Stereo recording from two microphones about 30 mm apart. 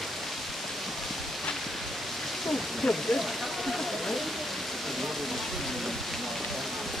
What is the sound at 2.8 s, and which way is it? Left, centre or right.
Speech, centre.